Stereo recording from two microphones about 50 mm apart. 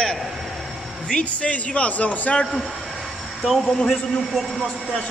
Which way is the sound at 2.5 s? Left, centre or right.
Centre.